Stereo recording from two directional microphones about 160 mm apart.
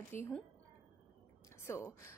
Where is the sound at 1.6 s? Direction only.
15° left (ahead or behind).